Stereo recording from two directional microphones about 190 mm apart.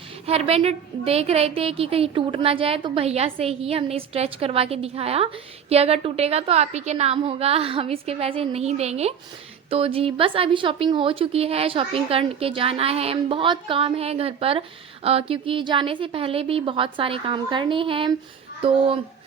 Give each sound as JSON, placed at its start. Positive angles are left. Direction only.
{"t": 0.3, "sound": "a woman's voice", "side_deg": -30}